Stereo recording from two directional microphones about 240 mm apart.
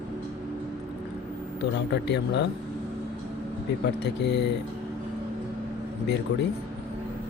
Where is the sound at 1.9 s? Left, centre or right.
Left.